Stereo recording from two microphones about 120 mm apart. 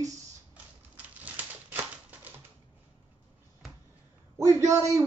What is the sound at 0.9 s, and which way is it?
Typewriter, 15° right (ahead or behind).